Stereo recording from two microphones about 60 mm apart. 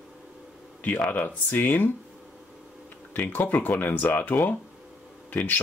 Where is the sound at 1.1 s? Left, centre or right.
Left.